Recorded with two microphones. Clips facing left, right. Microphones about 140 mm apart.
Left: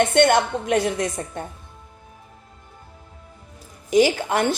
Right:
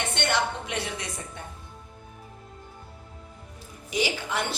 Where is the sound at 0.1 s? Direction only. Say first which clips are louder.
Left 10 dB; 50° left (ahead or behind).